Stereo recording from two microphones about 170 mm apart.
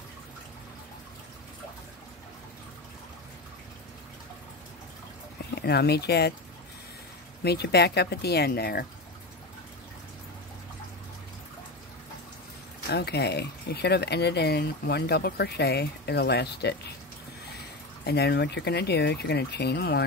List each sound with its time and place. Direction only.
5.5 s speech: 75° left (ahead or behind)
7.4 s speech: 75° left (ahead or behind)
12.9 s speech: 75° left (ahead or behind)
18.0 s speech: 70° left (ahead or behind)